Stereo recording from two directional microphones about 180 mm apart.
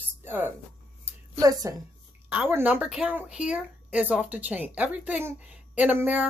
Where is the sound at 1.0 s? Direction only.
15° right (ahead or behind).